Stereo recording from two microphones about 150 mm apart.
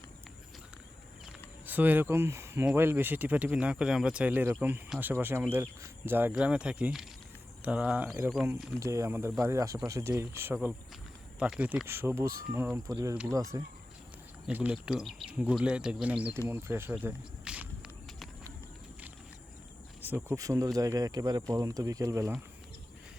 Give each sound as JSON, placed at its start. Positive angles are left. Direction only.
{"t": 1.6, "sound": "speech", "side_deg": -10}
{"t": 8.8, "sound": "speech", "side_deg": -20}
{"t": 14.4, "sound": "speech", "side_deg": -10}
{"t": 17.0, "sound": "snake", "side_deg": -10}
{"t": 20.0, "sound": "cricket", "side_deg": -15}
{"t": 20.3, "sound": "speech", "side_deg": -20}